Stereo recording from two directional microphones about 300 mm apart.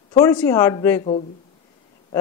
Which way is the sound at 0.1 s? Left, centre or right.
Centre.